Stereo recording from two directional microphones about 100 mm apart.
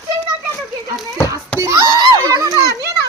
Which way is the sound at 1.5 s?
30° right (ahead or behind).